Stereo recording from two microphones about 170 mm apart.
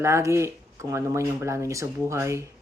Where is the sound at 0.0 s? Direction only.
15° right (ahead or behind).